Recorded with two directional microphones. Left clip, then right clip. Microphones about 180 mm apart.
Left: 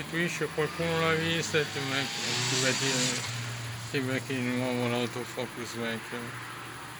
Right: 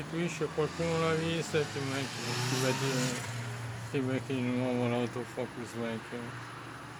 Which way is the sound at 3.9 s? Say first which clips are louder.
Left 2 dB; 5° right (ahead or behind).